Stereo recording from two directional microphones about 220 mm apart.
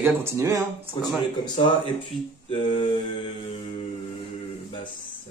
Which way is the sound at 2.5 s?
25° left (ahead or behind).